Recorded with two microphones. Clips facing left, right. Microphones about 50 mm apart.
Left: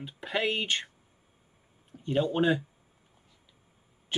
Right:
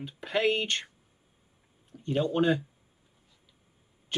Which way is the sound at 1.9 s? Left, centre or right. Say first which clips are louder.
Even; centre.